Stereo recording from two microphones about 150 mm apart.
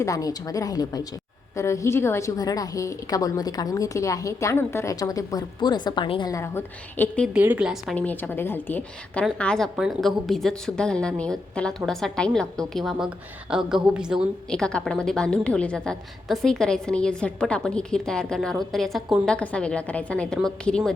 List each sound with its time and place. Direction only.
0.0 s a woman's voice: 25° left (ahead or behind)
7.3 s speech: 10° right (ahead or behind)
7.9 s a woman's voice: 10° left (ahead or behind)